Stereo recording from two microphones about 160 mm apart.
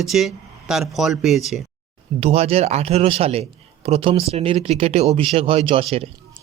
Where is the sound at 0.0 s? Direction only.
Centre (ahead or behind).